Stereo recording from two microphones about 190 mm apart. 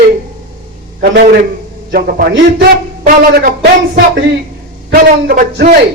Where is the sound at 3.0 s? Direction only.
45° right (ahead or behind).